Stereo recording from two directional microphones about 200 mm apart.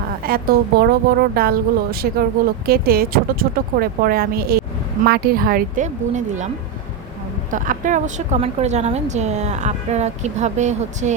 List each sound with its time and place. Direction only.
0.3 s a woman's voice: 50° right (ahead or behind)
7.5 s speech: 40° right (ahead or behind)